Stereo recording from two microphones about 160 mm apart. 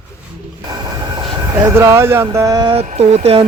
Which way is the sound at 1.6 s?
15° right (ahead or behind).